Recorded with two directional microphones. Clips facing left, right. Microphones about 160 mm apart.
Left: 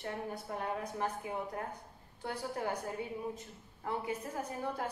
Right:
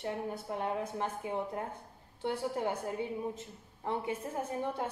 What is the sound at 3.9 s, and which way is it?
A woman's voice, 25° right (ahead or behind).